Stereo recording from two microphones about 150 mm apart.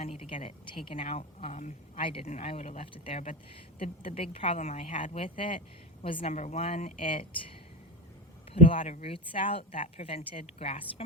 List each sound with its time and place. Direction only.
0.0 s a woman's voice: 40° left (ahead or behind)
2.0 s a woman's voice: 35° left (ahead or behind)
6.3 s speech: 50° left (ahead or behind)
7.0 s a woman's voice: 35° left (ahead or behind)
8.6 s a woman's voice: 35° left (ahead or behind)
9.7 s speech: 50° left (ahead or behind)
10.3 s a woman's voice: 40° left (ahead or behind)